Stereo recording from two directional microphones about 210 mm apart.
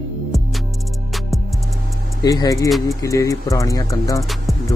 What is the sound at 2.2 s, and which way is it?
Speech, 15° left (ahead or behind).